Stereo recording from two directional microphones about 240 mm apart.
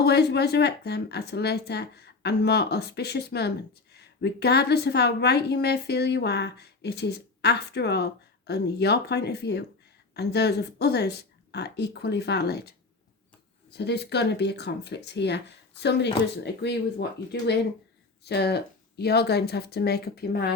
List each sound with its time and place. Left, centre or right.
0.0 s a woman's voice: left
13.7 s a woman's voice: left